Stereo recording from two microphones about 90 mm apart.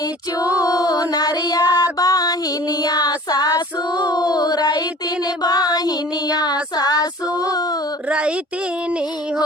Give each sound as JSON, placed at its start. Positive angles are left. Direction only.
{"t": 0.3, "sound": "music", "side_deg": 40}
{"t": 3.9, "sound": "child singing", "side_deg": 50}